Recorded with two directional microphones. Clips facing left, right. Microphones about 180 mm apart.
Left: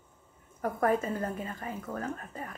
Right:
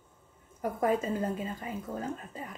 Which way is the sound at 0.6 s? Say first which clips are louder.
Left 1 dB; 15° right (ahead or behind).